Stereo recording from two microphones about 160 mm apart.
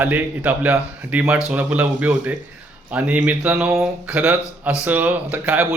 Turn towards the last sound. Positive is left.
turn(degrees=-10)  # may be behind; listen again after turning